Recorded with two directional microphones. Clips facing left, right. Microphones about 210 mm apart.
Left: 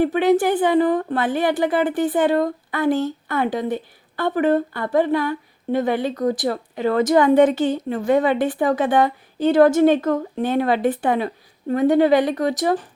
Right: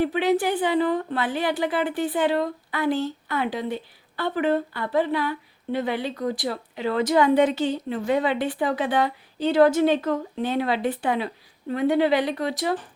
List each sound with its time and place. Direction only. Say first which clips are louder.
0.0 s a woman's voice: left 5 dB; 50° left (ahead or behind)